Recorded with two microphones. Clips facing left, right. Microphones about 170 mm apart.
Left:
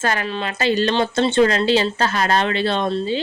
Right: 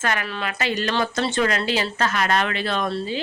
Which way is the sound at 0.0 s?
30° left (ahead or behind).